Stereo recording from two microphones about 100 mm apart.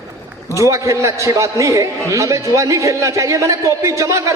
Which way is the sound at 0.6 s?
30° right (ahead or behind).